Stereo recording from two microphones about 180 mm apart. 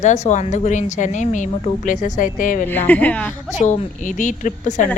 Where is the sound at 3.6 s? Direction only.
45° left (ahead or behind).